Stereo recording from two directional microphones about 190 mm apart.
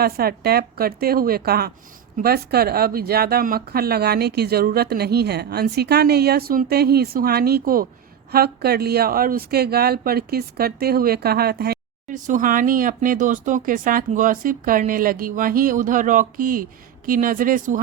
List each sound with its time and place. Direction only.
0.0 s speech: 55° right (ahead or behind)